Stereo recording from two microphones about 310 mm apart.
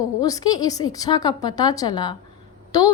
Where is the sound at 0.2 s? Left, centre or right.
Centre.